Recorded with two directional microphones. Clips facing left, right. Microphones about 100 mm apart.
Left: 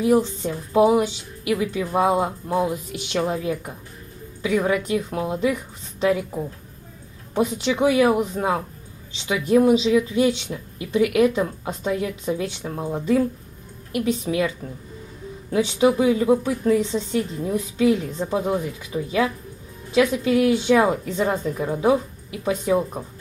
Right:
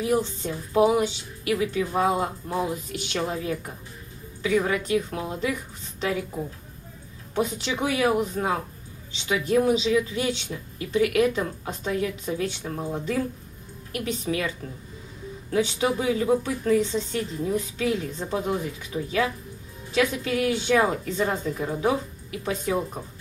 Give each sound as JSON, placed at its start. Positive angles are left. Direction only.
{"t": 0.0, "sound": "speech", "side_deg": 5}
{"t": 0.7, "sound": "speech", "side_deg": 20}
{"t": 1.0, "sound": "speech", "side_deg": 5}
{"t": 1.7, "sound": "speech", "side_deg": 15}
{"t": 7.8, "sound": "speech", "side_deg": 20}
{"t": 10.2, "sound": "speech", "side_deg": 25}
{"t": 11.0, "sound": "speech", "side_deg": 5}
{"t": 11.3, "sound": "speech", "side_deg": 15}
{"t": 15.5, "sound": "speech", "side_deg": 15}